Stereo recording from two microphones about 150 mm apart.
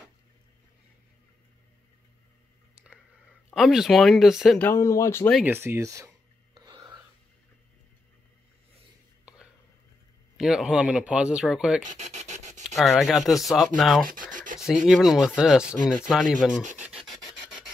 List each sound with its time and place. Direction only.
3.4 s speech: centre (ahead or behind)
4.6 s speech: 15° left (ahead or behind)
5.4 s a sound: 15° right (ahead or behind)
10.4 s speech: 5° right (ahead or behind)
12.0 s rub: 50° right (ahead or behind)
12.7 s speech: centre (ahead or behind)
14.0 s rub: 65° right (ahead or behind)
14.9 s speech: 5° right (ahead or behind)
16.8 s filing: 5° right (ahead or behind)